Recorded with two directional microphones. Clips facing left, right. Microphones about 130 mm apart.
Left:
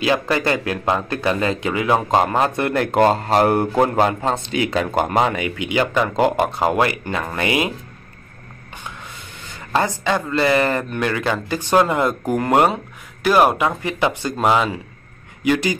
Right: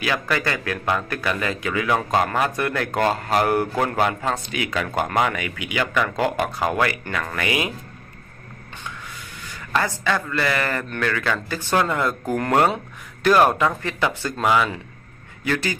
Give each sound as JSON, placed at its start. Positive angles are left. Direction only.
{"t": 0.0, "sound": "speech", "side_deg": 25}
{"t": 9.4, "sound": "speech", "side_deg": 25}
{"t": 12.7, "sound": "speech", "side_deg": 10}